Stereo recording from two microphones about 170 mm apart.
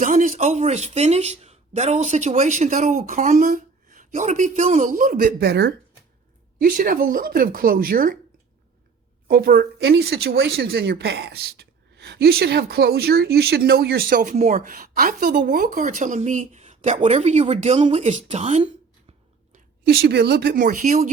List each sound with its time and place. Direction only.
0.0 s a man's voice: 50° right (ahead or behind)
5.4 s speech: 75° right (ahead or behind)
6.6 s speech: 55° right (ahead or behind)
9.2 s speech: 60° right (ahead or behind)
15.4 s a man's voice: 50° right (ahead or behind)
19.5 s a woman's voice: 65° right (ahead or behind)